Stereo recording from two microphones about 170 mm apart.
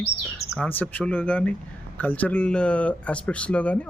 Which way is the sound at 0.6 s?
10° left (ahead or behind).